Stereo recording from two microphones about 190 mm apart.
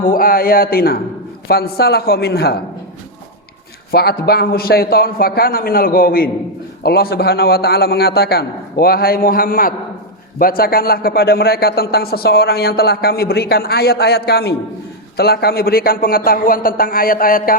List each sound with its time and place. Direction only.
0.0 s a man's voice: 50° left (ahead or behind)
3.9 s a man's voice: 55° left (ahead or behind)